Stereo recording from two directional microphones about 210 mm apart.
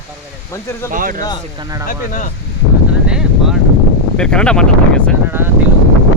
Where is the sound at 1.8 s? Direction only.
40° left (ahead or behind).